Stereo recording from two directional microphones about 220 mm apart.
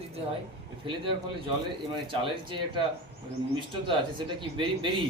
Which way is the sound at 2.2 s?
20° right (ahead or behind).